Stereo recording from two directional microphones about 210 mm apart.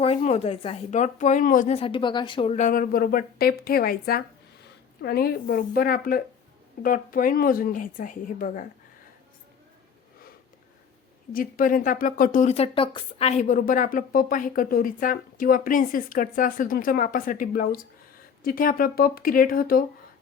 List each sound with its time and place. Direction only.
0.0 s speech: 30° left (ahead or behind)
11.3 s speech: 40° left (ahead or behind)